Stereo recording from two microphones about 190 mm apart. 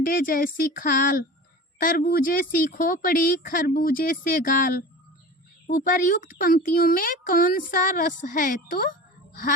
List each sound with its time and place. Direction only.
0.0 s speech: 45° left (ahead or behind)